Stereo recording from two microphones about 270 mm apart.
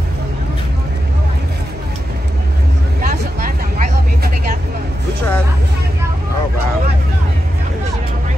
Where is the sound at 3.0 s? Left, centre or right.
Right.